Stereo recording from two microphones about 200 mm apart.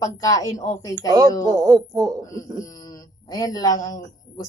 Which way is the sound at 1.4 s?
15° right (ahead or behind).